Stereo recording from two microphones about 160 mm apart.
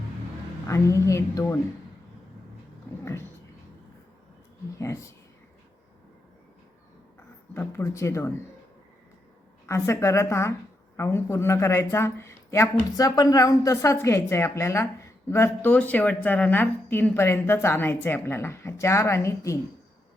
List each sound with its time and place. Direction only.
0.7 s a woman's voice: 20° left (ahead or behind)
3.0 s a sound: 15° left (ahead or behind)
7.5 s speech: 15° left (ahead or behind)
9.6 s speech: 20° left (ahead or behind)